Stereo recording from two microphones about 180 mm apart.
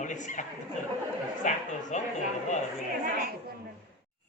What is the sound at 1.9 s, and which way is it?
Speech, 40° left (ahead or behind).